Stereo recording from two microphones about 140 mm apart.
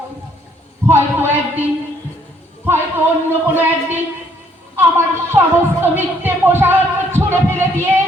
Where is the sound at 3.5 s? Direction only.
15° right (ahead or behind).